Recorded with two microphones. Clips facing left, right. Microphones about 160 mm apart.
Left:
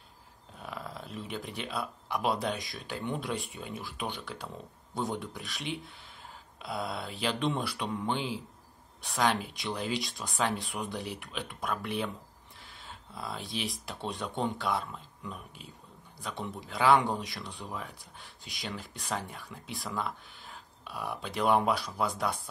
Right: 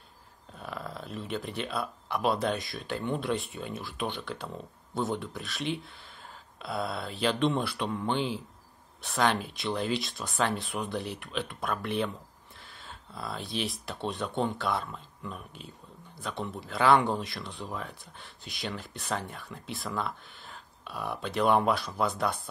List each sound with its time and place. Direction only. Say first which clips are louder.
0.6 s speech: right 2 dB; 15° left (ahead or behind)
16.2 s speech: right 2 dB; 10° left (ahead or behind)